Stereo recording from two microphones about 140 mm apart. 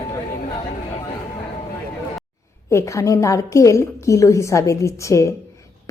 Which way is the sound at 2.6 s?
20° left (ahead or behind).